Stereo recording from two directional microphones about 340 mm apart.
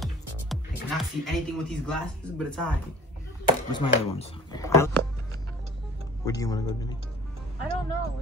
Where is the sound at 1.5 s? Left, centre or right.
Centre.